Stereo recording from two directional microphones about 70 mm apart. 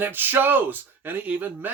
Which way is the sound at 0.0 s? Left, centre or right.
Right.